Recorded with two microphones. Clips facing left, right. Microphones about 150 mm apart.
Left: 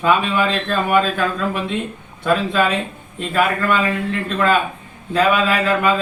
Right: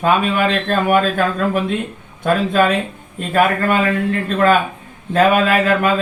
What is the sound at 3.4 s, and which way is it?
Speech, 45° right (ahead or behind).